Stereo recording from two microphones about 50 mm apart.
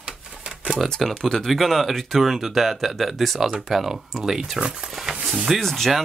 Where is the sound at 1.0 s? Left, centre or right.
Centre.